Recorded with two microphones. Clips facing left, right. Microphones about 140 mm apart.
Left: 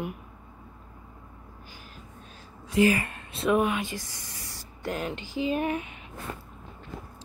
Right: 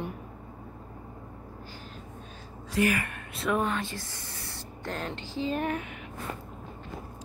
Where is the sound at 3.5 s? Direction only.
15° left (ahead or behind).